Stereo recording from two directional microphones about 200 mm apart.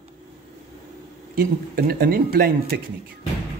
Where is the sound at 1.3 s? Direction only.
45° right (ahead or behind).